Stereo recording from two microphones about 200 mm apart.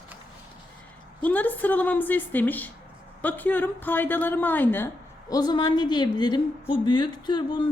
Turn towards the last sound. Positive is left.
turn(degrees=20)  # may be behind; listen again after turning